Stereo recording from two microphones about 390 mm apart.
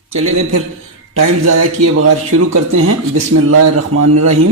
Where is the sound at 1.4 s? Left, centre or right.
Right.